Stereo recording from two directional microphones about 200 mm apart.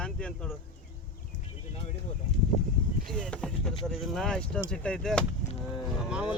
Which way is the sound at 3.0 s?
5° left (ahead or behind).